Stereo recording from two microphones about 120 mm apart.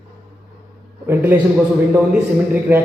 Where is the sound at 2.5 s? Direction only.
15° right (ahead or behind).